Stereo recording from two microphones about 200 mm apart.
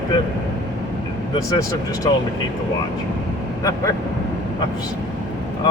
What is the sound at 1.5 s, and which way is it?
Speech, 15° left (ahead or behind).